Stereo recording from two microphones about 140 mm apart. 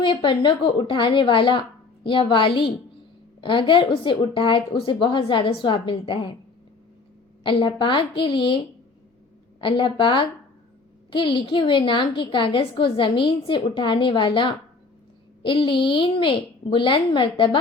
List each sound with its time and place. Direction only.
0.0 s a woman's voice: 35° left (ahead or behind)
7.4 s a woman's voice: 35° left (ahead or behind)